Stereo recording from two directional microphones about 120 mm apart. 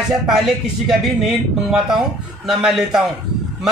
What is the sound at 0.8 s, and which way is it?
Speech, 5° right (ahead or behind).